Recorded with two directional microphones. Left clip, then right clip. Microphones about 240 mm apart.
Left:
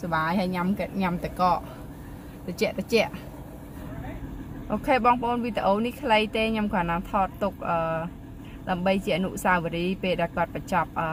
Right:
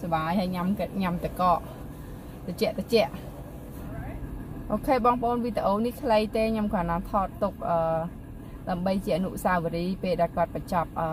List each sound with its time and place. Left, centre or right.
0.1 s a woman's voice: centre
4.6 s speech: centre